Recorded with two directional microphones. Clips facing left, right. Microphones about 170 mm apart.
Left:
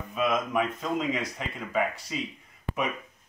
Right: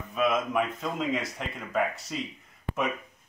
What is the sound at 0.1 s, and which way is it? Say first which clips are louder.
Speech: right 1 dB; centre (ahead or behind).